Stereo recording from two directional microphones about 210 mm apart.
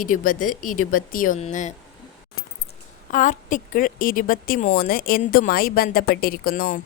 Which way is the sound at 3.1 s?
40° left (ahead or behind).